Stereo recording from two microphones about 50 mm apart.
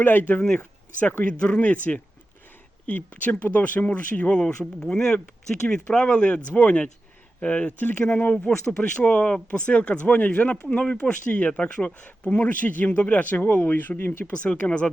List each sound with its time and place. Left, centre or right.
0.0 s speech: left
1.2 s speech: left
4.8 s speech: centre
7.8 s speech: left
13.4 s speech: left
14.4 s speech: left